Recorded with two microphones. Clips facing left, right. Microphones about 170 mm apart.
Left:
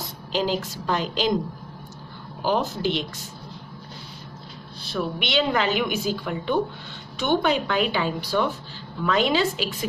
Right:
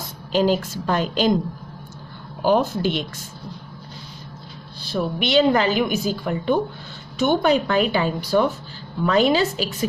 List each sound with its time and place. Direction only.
0.3 s a woman's voice: 50° right (ahead or behind)
2.4 s a woman's voice: 55° right (ahead or behind)
4.9 s a woman's voice: 40° right (ahead or behind)